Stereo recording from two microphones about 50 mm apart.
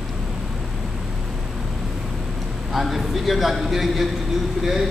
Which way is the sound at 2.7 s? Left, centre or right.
Centre.